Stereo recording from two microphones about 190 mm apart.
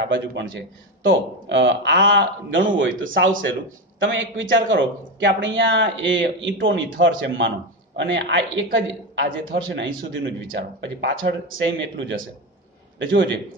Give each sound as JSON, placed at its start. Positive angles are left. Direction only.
{"t": 0.1, "sound": "a man's voice", "side_deg": -70}